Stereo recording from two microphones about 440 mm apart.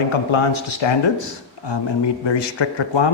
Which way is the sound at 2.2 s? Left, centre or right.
Left.